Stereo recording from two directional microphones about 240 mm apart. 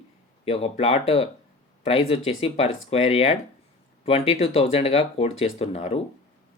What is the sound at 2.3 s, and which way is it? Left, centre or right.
Speech, left.